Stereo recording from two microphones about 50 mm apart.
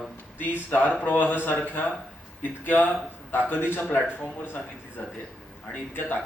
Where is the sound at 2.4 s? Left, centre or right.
Left.